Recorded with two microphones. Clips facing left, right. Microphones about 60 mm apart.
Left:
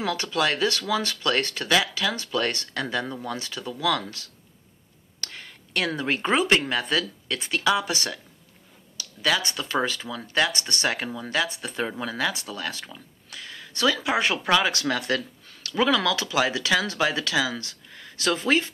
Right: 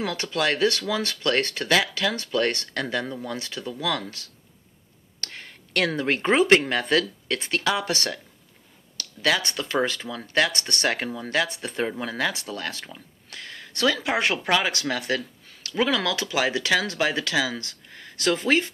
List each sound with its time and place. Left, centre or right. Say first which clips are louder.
0.0 s speech: left 1 dB; right
5.2 s a sound: right 1 dB; right
5.9 s speech: right 2 dB; right
9.5 s speech: right 1 dB; right
13.3 s a sound: right 1 dB; right
14.0 s speech: even; right